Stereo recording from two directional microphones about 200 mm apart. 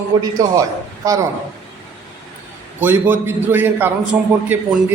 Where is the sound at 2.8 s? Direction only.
10° right (ahead or behind).